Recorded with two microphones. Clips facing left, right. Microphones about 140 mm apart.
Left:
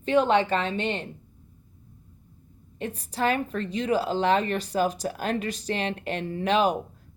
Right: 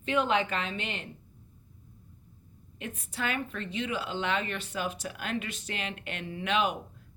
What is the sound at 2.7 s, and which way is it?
A woman's voice, 35° left (ahead or behind).